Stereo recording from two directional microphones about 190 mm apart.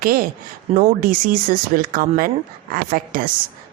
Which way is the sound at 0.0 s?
50° right (ahead or behind).